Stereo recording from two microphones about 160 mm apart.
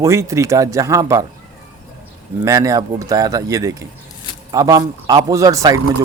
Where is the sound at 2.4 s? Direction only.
20° right (ahead or behind).